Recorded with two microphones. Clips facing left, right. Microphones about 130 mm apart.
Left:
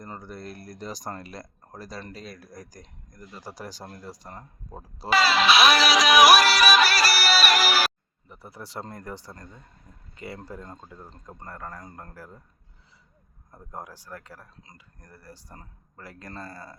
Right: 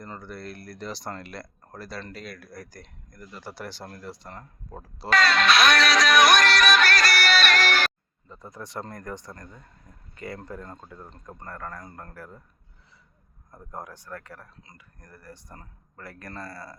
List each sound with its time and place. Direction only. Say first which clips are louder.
0.2 s speech: right 1 dB; 40° left (ahead or behind)
0.6 s speech: right 1 dB; 20° left (ahead or behind)
0.9 s speech: even; 40° left (ahead or behind)
1.7 s speech: right 1 dB; 15° left (ahead or behind)
2.2 s speech: right 1 dB; 40° left (ahead or behind)
2.8 s speech: right 1 dB; 15° left (ahead or behind)
5.0 s music: left 1 dB; 5° left (ahead or behind)
8.5 s speech: right 1 dB; 30° left (ahead or behind)
10.2 s speech: right 2 dB; 15° left (ahead or behind)
10.4 s speech: right 1 dB; 25° left (ahead or behind)
13.5 s speech: right 1 dB; 15° left (ahead or behind); by 16.7 s 35° left (ahead or behind)